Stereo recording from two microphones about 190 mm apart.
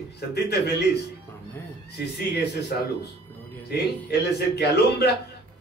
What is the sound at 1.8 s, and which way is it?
Speech, 60° left (ahead or behind).